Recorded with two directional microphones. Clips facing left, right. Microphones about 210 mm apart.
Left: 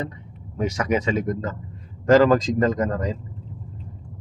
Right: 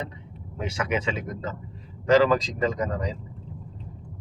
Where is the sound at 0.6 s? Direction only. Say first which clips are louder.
Left 5 dB; 40° left (ahead or behind).